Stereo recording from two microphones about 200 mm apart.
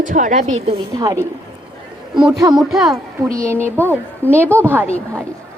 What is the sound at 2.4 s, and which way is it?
Speech, 20° right (ahead or behind).